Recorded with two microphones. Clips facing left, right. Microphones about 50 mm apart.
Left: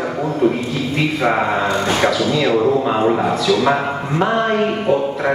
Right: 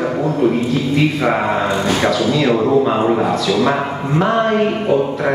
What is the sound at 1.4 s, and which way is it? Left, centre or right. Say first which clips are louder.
A man's voice: right 1 dB; centre.